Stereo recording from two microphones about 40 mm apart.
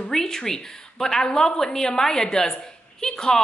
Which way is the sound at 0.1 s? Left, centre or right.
Centre.